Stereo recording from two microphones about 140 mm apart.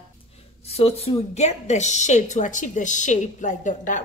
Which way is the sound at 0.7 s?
45° left (ahead or behind).